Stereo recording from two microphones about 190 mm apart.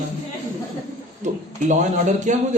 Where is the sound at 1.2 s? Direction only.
40° right (ahead or behind).